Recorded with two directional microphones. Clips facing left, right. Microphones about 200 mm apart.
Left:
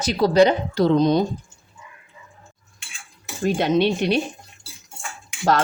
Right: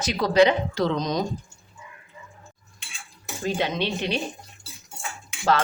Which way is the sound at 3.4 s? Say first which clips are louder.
Left 7 dB; 60° left (ahead or behind).